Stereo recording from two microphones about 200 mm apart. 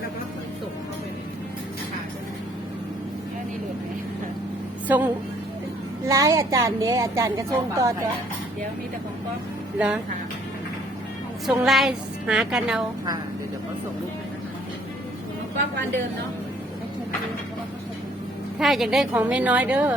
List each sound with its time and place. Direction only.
4.9 s a woman's voice: 10° right (ahead or behind)
9.7 s a woman's voice: 5° right (ahead or behind)
11.4 s a woman's voice: centre (ahead or behind)
18.6 s a woman's voice: centre (ahead or behind)